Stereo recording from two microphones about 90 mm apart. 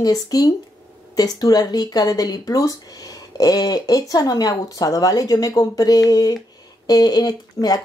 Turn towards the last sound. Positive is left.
turn(degrees=45)  # may be behind; listen again after turning